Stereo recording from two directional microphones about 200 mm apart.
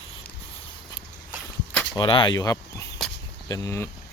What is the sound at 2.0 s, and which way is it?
Speech, 25° left (ahead or behind).